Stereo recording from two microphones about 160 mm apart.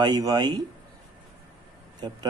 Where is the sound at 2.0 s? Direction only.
25° right (ahead or behind).